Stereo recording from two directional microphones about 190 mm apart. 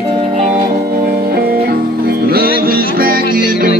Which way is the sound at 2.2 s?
50° right (ahead or behind).